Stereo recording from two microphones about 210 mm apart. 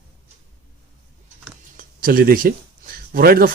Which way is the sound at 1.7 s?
45° right (ahead or behind).